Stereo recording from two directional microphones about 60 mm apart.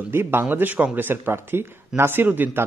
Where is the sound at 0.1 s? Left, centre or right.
Right.